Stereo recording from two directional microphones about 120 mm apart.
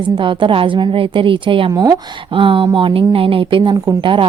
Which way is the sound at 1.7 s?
30° right (ahead or behind).